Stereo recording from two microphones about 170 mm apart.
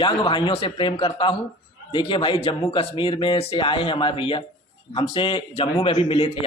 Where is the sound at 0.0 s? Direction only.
30° left (ahead or behind).